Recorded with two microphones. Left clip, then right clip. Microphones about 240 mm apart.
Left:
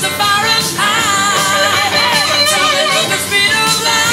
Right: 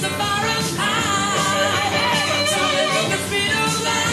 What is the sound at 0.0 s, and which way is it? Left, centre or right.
Music, centre.